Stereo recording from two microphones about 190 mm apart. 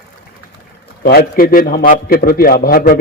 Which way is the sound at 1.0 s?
50° left (ahead or behind).